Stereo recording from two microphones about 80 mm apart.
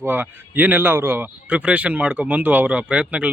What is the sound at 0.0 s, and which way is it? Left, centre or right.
Speech, right.